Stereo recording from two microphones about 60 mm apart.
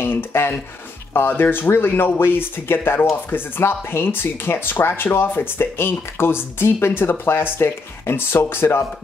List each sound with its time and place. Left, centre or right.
0.0 s speech: left